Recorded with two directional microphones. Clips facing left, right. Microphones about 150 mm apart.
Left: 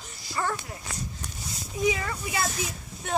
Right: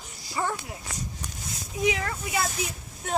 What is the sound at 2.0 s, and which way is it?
Speech, 5° right (ahead or behind).